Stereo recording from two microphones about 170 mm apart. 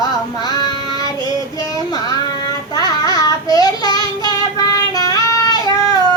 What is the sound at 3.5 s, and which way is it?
Child singing, 25° left (ahead or behind).